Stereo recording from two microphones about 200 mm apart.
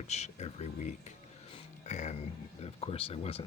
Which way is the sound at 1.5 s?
35° left (ahead or behind).